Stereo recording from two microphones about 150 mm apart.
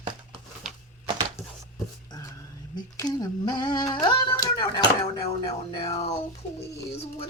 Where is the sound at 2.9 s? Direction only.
25° left (ahead or behind); by 6.2 s 45° left (ahead or behind).